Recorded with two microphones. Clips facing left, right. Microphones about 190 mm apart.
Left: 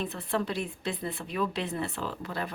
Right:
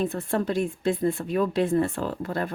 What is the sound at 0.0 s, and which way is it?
Speech, 45° right (ahead or behind).